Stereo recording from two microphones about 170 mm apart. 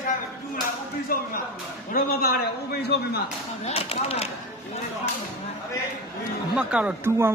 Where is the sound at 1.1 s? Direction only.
60° left (ahead or behind).